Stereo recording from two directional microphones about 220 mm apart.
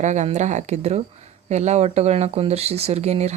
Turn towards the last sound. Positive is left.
turn(degrees=-30)  # may be behind; listen again after turning